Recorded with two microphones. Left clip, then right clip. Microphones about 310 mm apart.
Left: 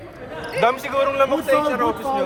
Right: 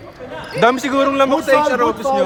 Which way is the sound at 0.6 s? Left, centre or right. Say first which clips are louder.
Right 5 dB; right.